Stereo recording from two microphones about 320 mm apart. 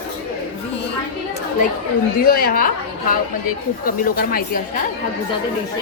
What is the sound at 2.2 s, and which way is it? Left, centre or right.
Speech, left.